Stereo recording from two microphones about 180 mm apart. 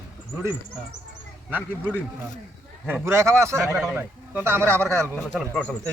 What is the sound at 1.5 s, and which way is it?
Speech, 10° right (ahead or behind).